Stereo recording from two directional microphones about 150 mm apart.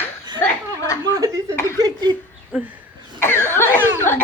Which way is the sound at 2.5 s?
10° right (ahead or behind).